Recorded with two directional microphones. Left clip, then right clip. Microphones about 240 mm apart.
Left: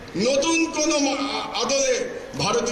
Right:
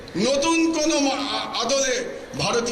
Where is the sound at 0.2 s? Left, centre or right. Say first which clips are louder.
Even; right.